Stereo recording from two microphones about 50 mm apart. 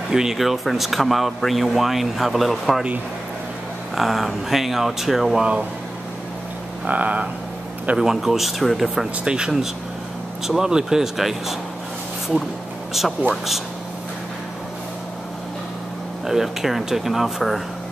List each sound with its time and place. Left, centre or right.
0.1 s a man's voice: centre
3.9 s a man's voice: centre
6.9 s a sound: right
8.0 s a man's voice: centre
9.2 s speech: centre
12.9 s a man's voice: centre
16.3 s a man's voice: centre